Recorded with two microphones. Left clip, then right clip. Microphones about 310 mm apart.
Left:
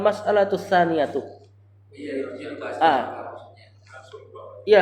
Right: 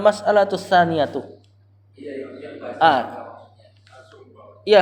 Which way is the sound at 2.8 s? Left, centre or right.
Right.